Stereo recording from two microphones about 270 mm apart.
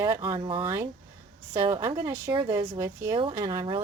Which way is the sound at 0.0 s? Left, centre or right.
Centre.